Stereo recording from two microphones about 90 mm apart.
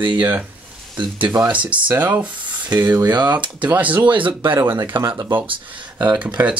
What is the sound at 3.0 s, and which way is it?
Speech, 55° right (ahead or behind).